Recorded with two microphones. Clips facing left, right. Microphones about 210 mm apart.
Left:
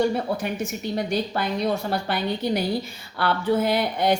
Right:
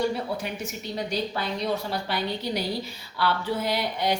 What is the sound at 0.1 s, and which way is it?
Speech, 50° left (ahead or behind).